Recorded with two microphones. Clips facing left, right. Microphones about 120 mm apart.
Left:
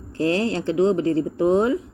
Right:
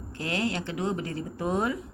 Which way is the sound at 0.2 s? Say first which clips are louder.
Left 9 dB; 30° left (ahead or behind).